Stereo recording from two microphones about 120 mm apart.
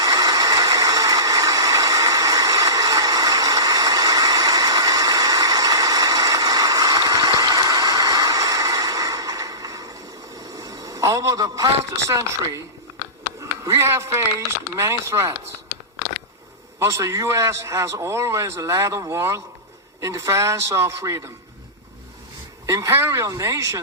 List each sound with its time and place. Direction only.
0.0 s engine: 30° right (ahead or behind)
10.3 s a sound: 30° right (ahead or behind)
13.7 s a man's voice: 25° right (ahead or behind)
16.8 s a man's voice: 25° right (ahead or behind)
22.6 s a man's voice: 25° right (ahead or behind)